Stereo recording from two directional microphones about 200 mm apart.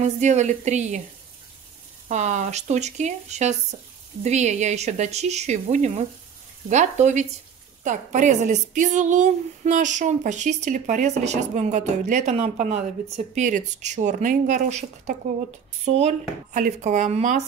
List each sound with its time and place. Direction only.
0.0 s a woman's voice: 35° right (ahead or behind)
2.0 s a woman's voice: 35° right (ahead or behind)